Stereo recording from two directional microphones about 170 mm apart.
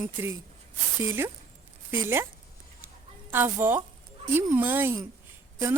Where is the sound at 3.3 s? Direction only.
15° right (ahead or behind).